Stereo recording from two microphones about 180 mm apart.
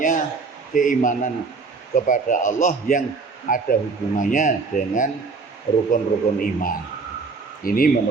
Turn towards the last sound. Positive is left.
turn(degrees=55)  # may be behind; listen again after turning